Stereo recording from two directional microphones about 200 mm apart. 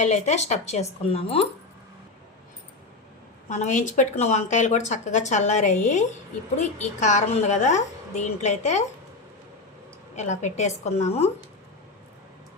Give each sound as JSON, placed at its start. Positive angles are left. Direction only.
{"t": 0.0, "sound": "speech", "side_deg": 35}
{"t": 3.5, "sound": "speech", "side_deg": 35}
{"t": 10.2, "sound": "speech", "side_deg": 35}